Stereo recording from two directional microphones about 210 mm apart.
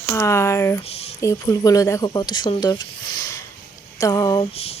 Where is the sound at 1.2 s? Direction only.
15° left (ahead or behind).